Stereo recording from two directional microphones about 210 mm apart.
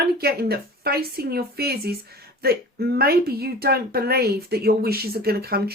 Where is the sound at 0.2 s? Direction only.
50° right (ahead or behind).